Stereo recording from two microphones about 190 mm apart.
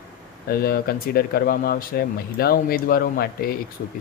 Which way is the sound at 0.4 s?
50° left (ahead or behind).